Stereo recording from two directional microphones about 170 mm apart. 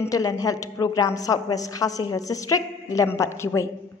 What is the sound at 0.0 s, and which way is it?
A woman's voice, 20° left (ahead or behind).